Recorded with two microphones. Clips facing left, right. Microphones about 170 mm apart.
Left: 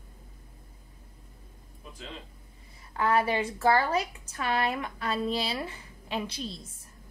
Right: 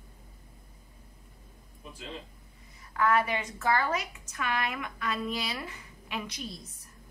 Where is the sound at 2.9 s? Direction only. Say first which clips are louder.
Left 1 dB; 30° left (ahead or behind).